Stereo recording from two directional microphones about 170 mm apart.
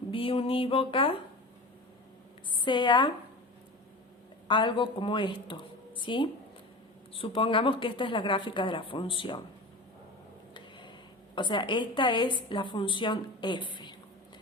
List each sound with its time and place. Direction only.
0.1 s a woman's voice: 30° left (ahead or behind)
2.6 s a woman's voice: 30° left (ahead or behind)
4.4 s a woman's voice: 30° left (ahead or behind)
10.5 s a sound: 30° left (ahead or behind)
11.3 s a woman's voice: 30° left (ahead or behind)